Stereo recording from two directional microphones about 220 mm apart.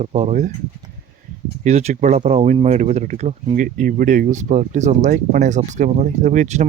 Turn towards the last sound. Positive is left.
turn(degrees=-35)  # may be behind; listen again after turning